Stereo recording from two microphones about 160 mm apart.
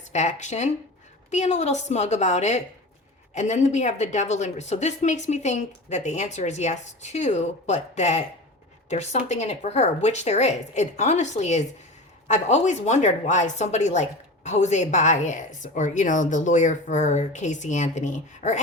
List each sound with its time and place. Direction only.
0.1 s a woman's voice: 45° left (ahead or behind)